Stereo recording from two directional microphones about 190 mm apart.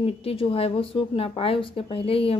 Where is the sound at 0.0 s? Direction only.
30° left (ahead or behind).